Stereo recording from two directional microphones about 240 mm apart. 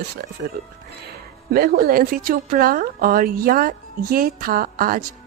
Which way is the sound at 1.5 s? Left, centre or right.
Right.